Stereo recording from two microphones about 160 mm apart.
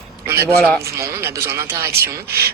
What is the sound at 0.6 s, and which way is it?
Speech, 5° left (ahead or behind).